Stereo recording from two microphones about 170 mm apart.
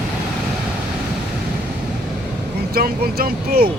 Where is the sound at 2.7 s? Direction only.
65° right (ahead or behind).